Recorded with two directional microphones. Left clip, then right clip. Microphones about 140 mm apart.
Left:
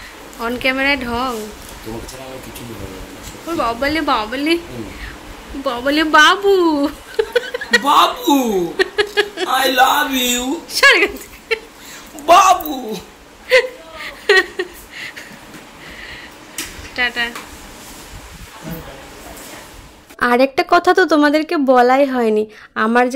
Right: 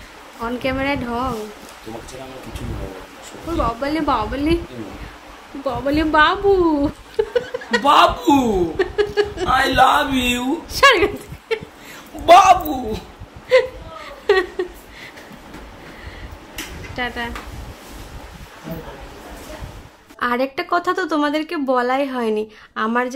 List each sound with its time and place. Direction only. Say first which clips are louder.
0.4 s a woman's voice: left 5 dB; centre (ahead or behind)
3.5 s a woman's voice: left 3 dB; centre (ahead or behind)
5.6 s a woman's voice: left 3 dB; 5° left (ahead or behind)
13.5 s a sound: left 2 dB; 5° right (ahead or behind)
16.9 s speech: left 7 dB; 20° right (ahead or behind)
20.2 s a woman's voice: left 7 dB; 45° left (ahead or behind)